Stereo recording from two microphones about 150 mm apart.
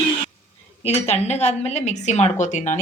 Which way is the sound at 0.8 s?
45° left (ahead or behind).